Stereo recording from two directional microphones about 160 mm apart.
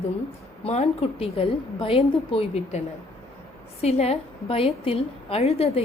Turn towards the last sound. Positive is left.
turn(degrees=40)  # may be behind; listen again after turning